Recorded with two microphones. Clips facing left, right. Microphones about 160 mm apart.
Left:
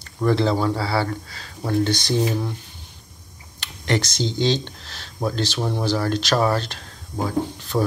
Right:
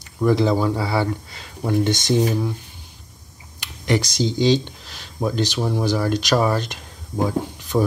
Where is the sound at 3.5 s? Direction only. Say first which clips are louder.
Right 2 dB; 10° right (ahead or behind).